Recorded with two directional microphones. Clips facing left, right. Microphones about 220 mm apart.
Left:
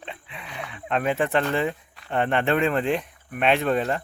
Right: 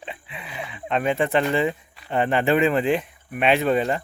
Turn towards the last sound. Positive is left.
turn(degrees=0)  # may be behind; listen again after turning